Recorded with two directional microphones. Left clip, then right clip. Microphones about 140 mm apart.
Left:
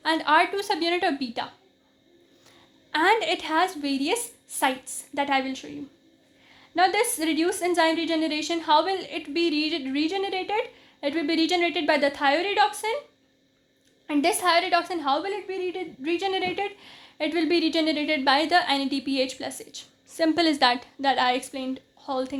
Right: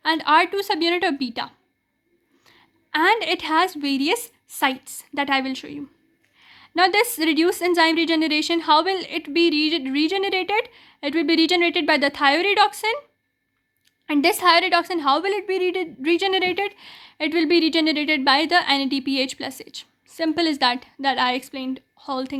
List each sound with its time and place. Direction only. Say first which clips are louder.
0.0 s a woman's voice: right 3 dB; 25° right (ahead or behind)
2.9 s a woman's voice: right 3 dB; 25° right (ahead or behind)
14.1 s a woman's voice: right 5 dB; 25° right (ahead or behind)